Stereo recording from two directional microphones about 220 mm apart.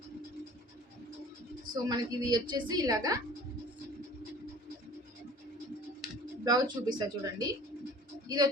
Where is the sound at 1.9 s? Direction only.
20° right (ahead or behind).